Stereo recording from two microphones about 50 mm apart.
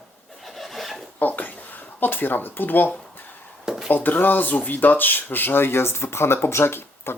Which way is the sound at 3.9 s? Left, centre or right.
Left.